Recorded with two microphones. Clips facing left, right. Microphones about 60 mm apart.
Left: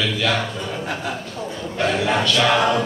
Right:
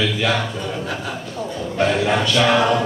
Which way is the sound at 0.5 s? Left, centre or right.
Centre.